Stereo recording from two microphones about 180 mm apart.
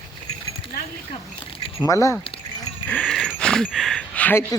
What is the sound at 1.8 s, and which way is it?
Speech, 20° left (ahead or behind).